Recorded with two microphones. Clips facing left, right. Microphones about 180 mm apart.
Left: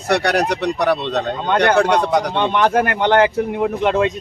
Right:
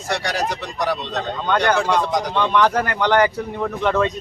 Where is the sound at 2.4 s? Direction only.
25° left (ahead or behind).